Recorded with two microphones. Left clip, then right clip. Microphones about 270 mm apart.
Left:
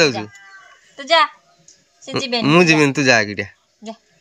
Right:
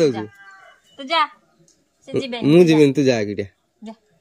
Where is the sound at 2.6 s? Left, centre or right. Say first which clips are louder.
Even; centre.